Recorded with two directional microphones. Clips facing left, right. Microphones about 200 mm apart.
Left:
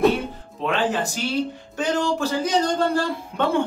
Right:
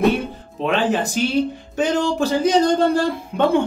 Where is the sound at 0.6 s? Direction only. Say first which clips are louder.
Right 3 dB; 20° right (ahead or behind).